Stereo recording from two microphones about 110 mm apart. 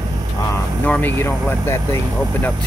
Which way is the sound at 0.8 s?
15° left (ahead or behind).